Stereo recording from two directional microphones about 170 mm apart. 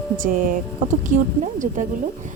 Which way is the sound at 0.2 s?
55° right (ahead or behind).